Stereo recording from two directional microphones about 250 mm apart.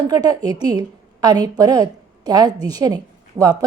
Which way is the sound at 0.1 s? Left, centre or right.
Centre.